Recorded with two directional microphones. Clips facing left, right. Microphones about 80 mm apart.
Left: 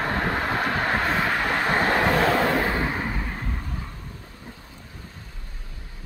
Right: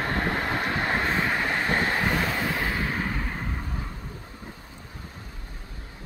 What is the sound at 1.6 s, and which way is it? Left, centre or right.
Vehicle, left.